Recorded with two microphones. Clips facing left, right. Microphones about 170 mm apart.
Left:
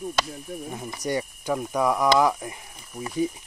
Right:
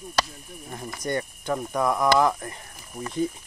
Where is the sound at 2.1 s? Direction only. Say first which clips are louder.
Even; 10° left (ahead or behind).